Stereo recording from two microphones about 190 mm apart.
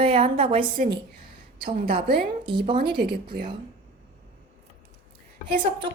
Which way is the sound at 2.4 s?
25° right (ahead or behind).